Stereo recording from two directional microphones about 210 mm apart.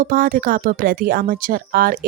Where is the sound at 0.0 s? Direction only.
40° right (ahead or behind).